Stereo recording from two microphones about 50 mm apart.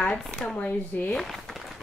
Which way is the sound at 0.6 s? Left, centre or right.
Left.